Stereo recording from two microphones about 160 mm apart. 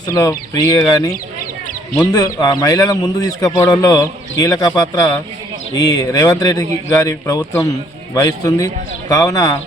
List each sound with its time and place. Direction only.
0.1 s speech: 25° left (ahead or behind)
2.1 s speech: 25° left (ahead or behind)